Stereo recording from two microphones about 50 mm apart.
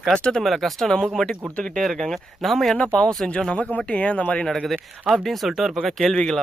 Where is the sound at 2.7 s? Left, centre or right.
Centre.